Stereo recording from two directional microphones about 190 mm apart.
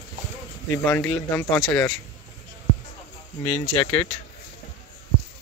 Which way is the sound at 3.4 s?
30° left (ahead or behind).